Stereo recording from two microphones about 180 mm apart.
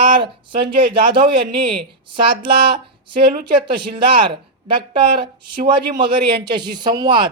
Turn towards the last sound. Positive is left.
turn(degrees=-25)  # may be behind; listen again after turning